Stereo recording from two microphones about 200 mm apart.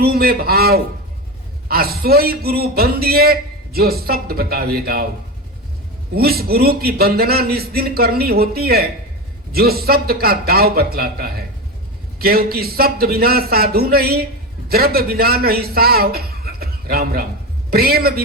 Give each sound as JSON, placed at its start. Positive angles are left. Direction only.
{"t": 0.0, "sound": "a man's voice", "side_deg": -50}
{"t": 6.1, "sound": "a man's voice", "side_deg": -50}